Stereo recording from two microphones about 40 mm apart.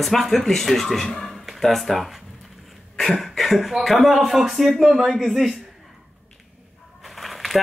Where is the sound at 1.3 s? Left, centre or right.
Centre.